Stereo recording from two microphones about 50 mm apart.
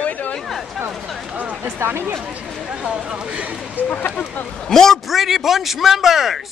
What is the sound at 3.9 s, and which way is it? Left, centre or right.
Speech, left.